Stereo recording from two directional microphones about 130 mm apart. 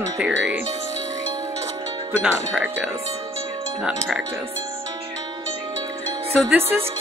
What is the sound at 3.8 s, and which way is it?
Speech, 5° right (ahead or behind).